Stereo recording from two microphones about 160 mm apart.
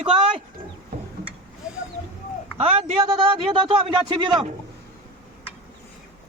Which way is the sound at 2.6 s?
35° right (ahead or behind).